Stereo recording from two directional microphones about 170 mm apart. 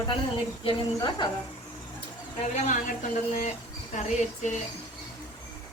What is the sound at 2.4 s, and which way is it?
Speech, 45° left (ahead or behind).